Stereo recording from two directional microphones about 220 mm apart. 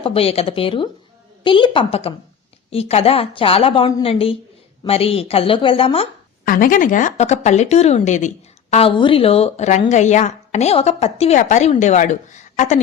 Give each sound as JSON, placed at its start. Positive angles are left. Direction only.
{"t": 0.0, "sound": "a woman's voice", "side_deg": 25}
{"t": 6.4, "sound": "a woman's voice", "side_deg": 40}